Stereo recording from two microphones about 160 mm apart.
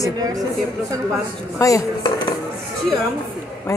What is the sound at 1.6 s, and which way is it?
Speech, 20° left (ahead or behind).